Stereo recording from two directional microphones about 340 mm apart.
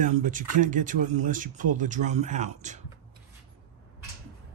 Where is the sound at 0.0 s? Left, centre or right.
Right.